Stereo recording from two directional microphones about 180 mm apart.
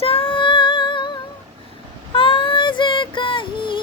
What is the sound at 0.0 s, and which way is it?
Music, 30° left (ahead or behind).